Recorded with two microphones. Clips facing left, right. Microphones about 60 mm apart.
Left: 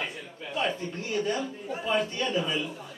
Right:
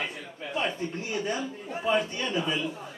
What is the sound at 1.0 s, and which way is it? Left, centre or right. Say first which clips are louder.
A man's voice: left 2 dB; centre.